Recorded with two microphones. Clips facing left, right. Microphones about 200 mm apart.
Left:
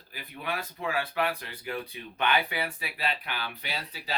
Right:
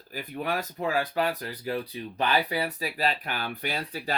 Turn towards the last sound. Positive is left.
turn(degrees=-50)  # may be behind; listen again after turning